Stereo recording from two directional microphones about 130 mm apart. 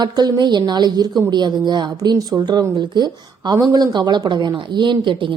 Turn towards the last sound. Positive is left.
turn(degrees=-40)  # may be behind; listen again after turning